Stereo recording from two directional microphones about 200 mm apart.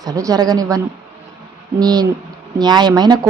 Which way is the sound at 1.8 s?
20° right (ahead or behind).